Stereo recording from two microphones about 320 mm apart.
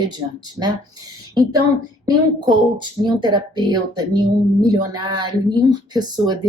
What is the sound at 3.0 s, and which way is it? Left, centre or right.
Speech, centre.